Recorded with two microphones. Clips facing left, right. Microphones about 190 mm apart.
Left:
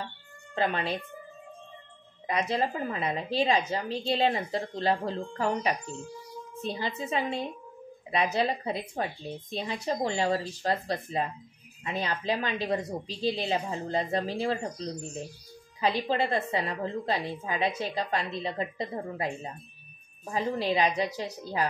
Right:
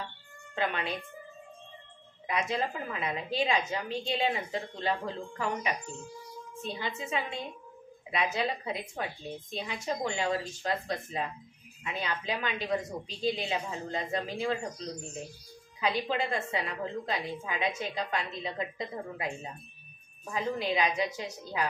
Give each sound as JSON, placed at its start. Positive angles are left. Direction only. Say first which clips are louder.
{"t": 0.6, "sound": "a woman's voice", "louder": "left 4 dB", "side_deg": 35}
{"t": 2.2, "sound": "a woman's voice", "louder": "left 3 dB", "side_deg": 35}
{"t": 15.8, "sound": "a woman's voice", "louder": "left 3 dB", "side_deg": 35}